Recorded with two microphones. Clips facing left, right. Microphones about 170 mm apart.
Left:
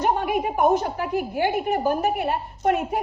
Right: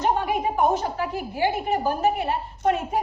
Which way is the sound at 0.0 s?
55° left (ahead or behind).